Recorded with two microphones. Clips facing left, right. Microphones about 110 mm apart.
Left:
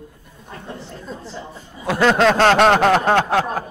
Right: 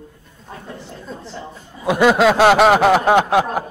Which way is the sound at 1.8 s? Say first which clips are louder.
Right 2 dB; 15° right (ahead or behind).